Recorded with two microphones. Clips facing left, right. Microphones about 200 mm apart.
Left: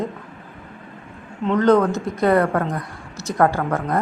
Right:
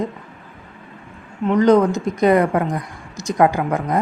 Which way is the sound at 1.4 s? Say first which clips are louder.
Right 2 dB; 15° right (ahead or behind).